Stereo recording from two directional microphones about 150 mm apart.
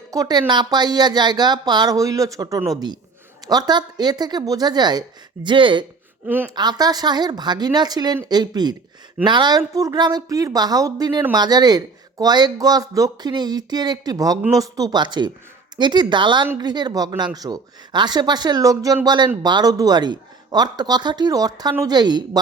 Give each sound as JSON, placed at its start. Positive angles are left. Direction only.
{"t": 0.1, "sound": "speech", "side_deg": -25}
{"t": 6.2, "sound": "a woman's voice", "side_deg": -10}
{"t": 6.5, "sound": "a woman's voice", "side_deg": -30}